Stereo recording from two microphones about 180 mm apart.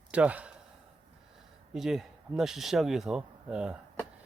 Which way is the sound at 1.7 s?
Centre (ahead or behind).